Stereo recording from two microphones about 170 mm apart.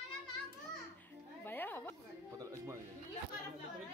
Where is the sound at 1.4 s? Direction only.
10° left (ahead or behind).